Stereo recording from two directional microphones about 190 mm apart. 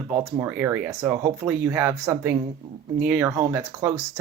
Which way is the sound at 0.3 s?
10° right (ahead or behind).